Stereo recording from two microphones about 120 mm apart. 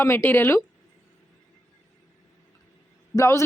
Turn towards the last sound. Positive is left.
turn(degrees=25)  # may be behind; listen again after turning